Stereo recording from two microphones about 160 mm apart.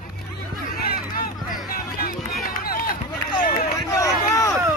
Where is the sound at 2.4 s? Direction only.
65° left (ahead or behind).